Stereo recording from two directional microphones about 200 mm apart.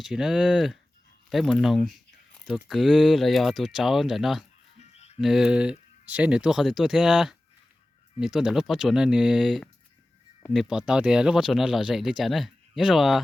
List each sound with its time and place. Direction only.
0.0 s speech: 5° right (ahead or behind)
4.8 s music: 35° left (ahead or behind)
5.2 s speech: centre (ahead or behind)